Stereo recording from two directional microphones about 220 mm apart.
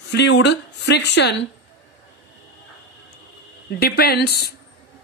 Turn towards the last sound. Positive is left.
turn(degrees=45)  # may be behind; listen again after turning